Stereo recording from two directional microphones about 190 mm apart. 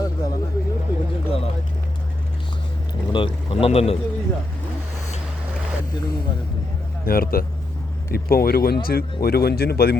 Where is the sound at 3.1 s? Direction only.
30° left (ahead or behind).